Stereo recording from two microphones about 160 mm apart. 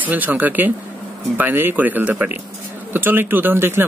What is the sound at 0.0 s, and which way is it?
Speech, 10° right (ahead or behind).